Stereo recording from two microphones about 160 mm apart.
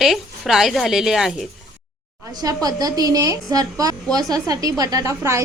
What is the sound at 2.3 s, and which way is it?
A woman's voice, 25° right (ahead or behind).